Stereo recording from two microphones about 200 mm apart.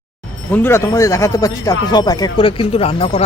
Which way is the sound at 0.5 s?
10° left (ahead or behind).